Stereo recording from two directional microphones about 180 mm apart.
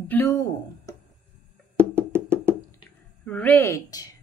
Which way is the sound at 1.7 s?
10° right (ahead or behind).